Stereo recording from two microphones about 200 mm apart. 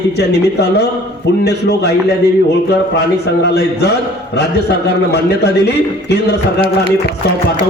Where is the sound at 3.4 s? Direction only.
55° left (ahead or behind).